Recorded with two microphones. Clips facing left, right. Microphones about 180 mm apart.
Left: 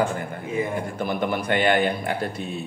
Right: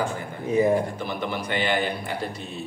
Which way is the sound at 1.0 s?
50° left (ahead or behind).